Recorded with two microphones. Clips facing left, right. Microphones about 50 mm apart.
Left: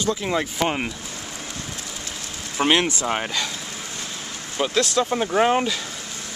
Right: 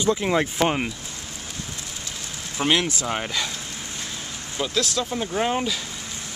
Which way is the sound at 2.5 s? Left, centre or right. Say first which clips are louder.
Left 3 dB; left.